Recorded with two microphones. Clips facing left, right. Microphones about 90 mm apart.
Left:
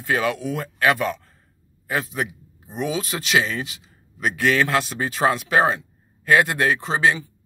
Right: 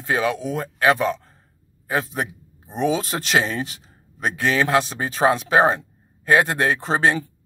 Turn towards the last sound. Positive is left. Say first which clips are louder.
# right 1 dB
turn(degrees=-40)  # may be behind; listen again after turning